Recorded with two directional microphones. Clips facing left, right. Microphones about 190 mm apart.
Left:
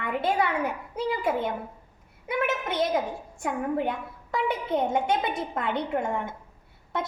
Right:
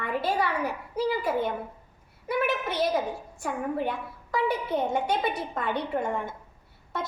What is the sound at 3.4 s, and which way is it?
A child's voice, 20° left (ahead or behind).